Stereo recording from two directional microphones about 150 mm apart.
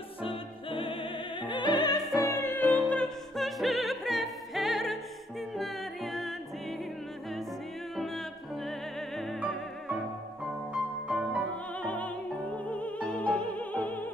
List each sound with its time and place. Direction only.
0.2 s opera: 35° left (ahead or behind)
2.2 s music: 15° left (ahead or behind)
7.9 s music: centre (ahead or behind)
10.7 s music: 5° right (ahead or behind)
11.8 s opera: 10° left (ahead or behind)